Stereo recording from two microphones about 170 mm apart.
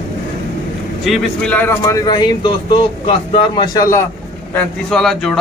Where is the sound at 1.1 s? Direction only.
10° left (ahead or behind).